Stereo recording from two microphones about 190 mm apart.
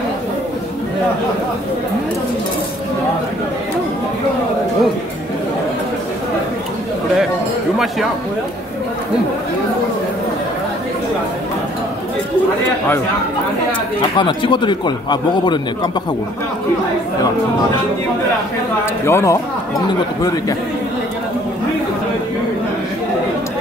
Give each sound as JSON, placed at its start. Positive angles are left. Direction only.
{"t": 14.1, "sound": "a man's voice", "side_deg": 25}
{"t": 19.0, "sound": "a man's voice", "side_deg": 15}